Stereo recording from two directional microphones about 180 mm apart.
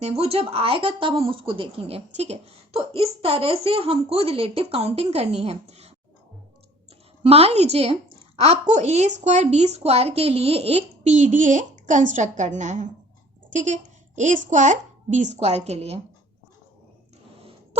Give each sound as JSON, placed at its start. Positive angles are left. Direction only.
{"t": 0.0, "sound": "speech", "side_deg": -35}
{"t": 7.2, "sound": "speech", "side_deg": -35}